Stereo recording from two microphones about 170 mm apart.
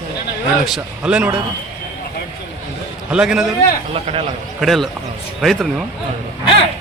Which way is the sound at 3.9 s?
35° right (ahead or behind).